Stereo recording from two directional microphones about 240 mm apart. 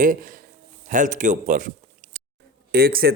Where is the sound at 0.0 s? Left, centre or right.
Right.